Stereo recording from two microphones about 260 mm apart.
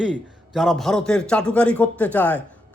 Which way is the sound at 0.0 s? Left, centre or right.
Centre.